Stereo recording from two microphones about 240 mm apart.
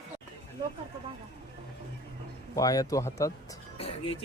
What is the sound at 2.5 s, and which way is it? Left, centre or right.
Speech, centre.